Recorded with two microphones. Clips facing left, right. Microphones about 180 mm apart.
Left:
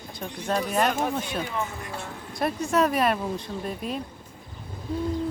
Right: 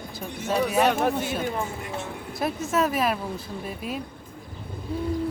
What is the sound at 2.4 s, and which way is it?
Speech, centre (ahead or behind).